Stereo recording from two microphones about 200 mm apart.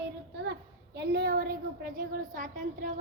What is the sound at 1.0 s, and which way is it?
Speech, 55° right (ahead or behind).